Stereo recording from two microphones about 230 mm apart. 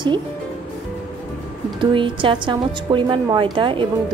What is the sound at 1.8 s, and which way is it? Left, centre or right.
A woman's voice, right.